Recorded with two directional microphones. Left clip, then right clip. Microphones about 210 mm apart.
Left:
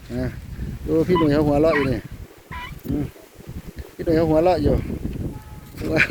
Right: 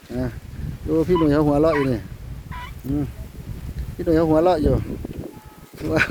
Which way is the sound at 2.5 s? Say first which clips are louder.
Left 2 dB; 50° right (ahead or behind).